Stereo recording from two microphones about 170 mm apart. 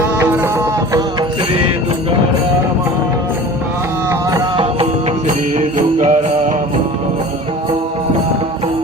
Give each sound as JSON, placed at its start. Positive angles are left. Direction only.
{"t": 0.0, "sound": "music", "side_deg": -15}
{"t": 4.1, "sound": "music", "side_deg": -20}
{"t": 5.5, "sound": "music", "side_deg": -45}